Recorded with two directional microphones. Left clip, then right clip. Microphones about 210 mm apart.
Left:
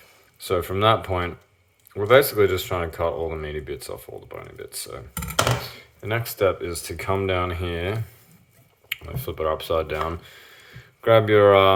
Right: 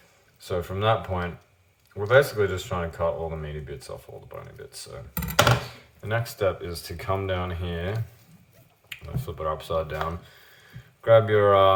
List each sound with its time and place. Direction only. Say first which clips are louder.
0.3 s speech: left 6 dB; 40° left (ahead or behind)
6.0 s speech: left 4 dB; 35° left (ahead or behind)